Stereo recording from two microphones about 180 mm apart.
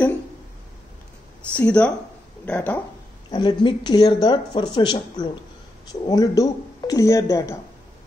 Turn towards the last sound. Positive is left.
turn(degrees=15)  # may be behind; listen again after turning